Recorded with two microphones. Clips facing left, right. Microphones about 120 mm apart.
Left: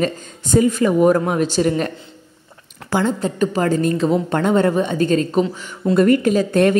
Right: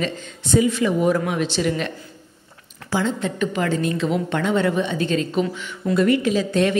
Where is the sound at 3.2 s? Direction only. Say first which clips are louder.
Left 4 dB; 40° left (ahead or behind).